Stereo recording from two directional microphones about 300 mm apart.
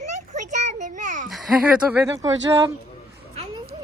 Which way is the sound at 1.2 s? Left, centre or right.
Centre.